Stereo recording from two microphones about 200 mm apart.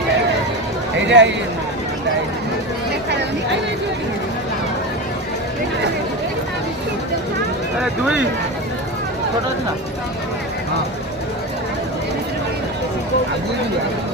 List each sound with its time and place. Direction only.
1.0 s speech: 65° right (ahead or behind)